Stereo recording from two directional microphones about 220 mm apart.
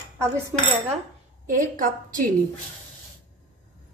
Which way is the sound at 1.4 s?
35° right (ahead or behind).